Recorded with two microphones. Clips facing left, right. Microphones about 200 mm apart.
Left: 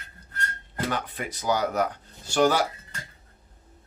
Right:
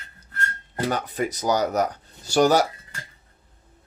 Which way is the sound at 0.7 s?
40° right (ahead or behind).